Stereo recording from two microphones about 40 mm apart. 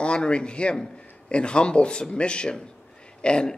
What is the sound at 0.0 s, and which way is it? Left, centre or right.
Speech, left.